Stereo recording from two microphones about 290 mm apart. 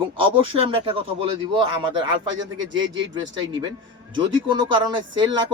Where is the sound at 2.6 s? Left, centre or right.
Right.